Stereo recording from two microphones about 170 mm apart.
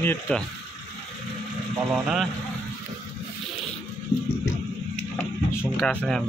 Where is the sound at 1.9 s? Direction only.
5° right (ahead or behind).